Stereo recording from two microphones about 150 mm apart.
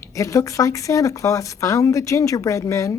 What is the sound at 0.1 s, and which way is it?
Speech, 20° left (ahead or behind).